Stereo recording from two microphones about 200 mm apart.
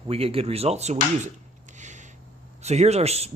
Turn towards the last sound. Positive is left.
turn(degrees=-30)  # may be behind; listen again after turning